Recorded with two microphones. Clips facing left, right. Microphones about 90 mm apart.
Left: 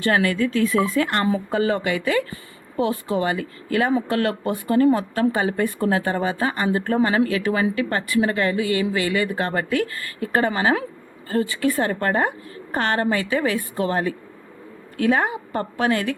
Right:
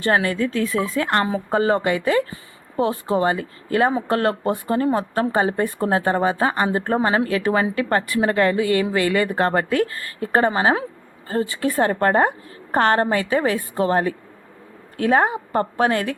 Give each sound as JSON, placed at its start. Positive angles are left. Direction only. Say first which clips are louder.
{"t": 0.0, "sound": "speech", "louder": "even", "side_deg": -35}